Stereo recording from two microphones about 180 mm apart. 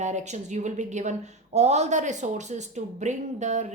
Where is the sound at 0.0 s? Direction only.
40° right (ahead or behind).